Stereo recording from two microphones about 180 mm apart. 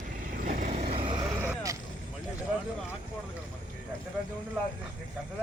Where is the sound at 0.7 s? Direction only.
35° right (ahead or behind).